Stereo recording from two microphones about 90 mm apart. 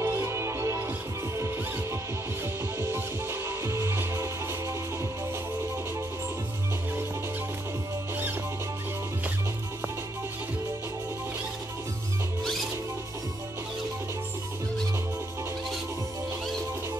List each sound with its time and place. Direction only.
0.0 s music: 30° right (ahead or behind)
2.8 s music: 25° right (ahead or behind)